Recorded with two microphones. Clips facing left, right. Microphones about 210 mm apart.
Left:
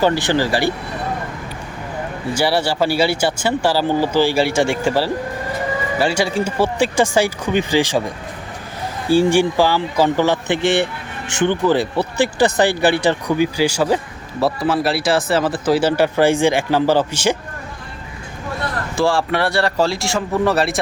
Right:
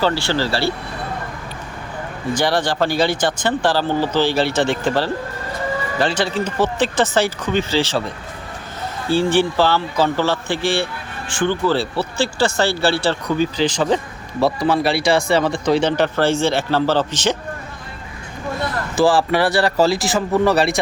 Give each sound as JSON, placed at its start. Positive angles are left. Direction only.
{"t": 0.0, "sound": "speech", "side_deg": 15}
{"t": 2.3, "sound": "speech", "side_deg": 10}
{"t": 18.9, "sound": "speech", "side_deg": -5}